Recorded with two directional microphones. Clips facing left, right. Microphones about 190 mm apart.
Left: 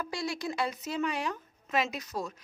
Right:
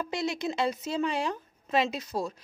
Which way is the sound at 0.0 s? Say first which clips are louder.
Right 4 dB; 20° right (ahead or behind).